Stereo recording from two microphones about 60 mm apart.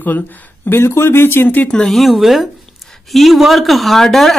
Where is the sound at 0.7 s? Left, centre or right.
Left.